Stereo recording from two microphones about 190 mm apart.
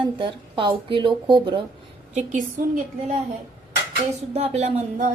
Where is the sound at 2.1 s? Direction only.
40° right (ahead or behind).